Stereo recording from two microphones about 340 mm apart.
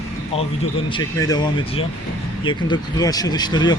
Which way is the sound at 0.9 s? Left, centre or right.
Centre.